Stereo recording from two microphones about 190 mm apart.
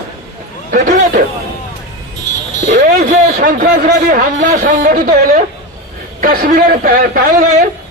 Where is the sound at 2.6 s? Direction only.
45° right (ahead or behind).